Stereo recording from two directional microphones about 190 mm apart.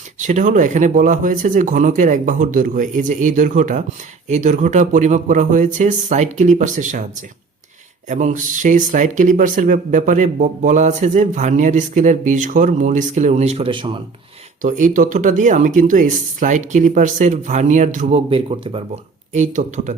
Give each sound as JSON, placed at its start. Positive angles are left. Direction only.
{"t": 0.2, "sound": "speech", "side_deg": -40}
{"t": 8.0, "sound": "speech", "side_deg": -40}
{"t": 14.6, "sound": "speech", "side_deg": -40}
{"t": 18.3, "sound": "speech", "side_deg": -30}
{"t": 19.3, "sound": "speech", "side_deg": -40}